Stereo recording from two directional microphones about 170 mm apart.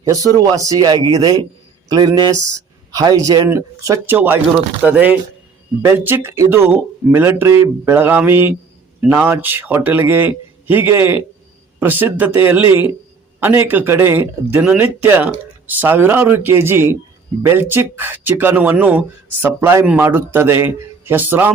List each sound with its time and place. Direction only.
0.1 s speech: 20° right (ahead or behind)